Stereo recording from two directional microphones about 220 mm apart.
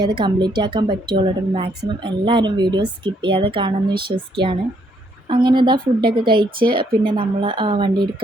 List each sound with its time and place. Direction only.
0.0 s a woman's voice: 20° right (ahead or behind)